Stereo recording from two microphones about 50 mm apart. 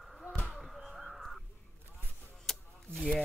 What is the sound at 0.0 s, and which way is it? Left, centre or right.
Basketball bounce, centre.